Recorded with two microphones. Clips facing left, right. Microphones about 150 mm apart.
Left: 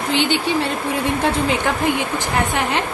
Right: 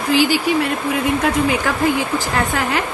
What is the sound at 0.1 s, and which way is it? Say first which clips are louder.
A woman's voice: right 4 dB; 25° left (ahead or behind).